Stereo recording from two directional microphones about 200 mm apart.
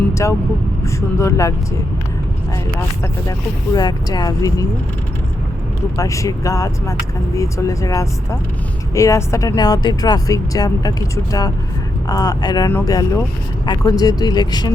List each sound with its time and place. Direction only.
0.1 s speech: 15° left (ahead or behind)
3.8 s speech: 20° left (ahead or behind)
6.0 s speech: 15° left (ahead or behind)